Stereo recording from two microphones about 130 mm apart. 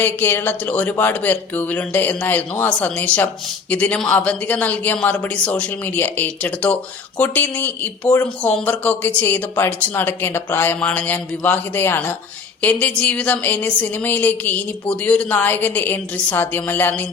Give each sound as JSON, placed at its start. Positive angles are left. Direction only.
{"t": 0.0, "sound": "a woman's voice", "side_deg": 15}